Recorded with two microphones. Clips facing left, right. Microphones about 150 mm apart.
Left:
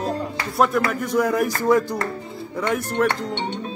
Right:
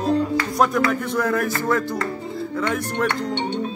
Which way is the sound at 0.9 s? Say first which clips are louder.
Left 1 dB; 10° left (ahead or behind).